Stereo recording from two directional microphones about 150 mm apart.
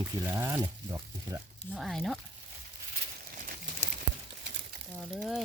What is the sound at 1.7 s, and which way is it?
Speech, centre (ahead or behind).